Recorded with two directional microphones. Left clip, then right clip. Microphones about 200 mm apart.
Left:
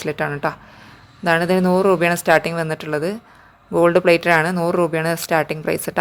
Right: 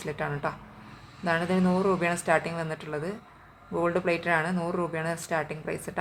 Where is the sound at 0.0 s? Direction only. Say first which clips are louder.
Left 9 dB; 40° left (ahead or behind).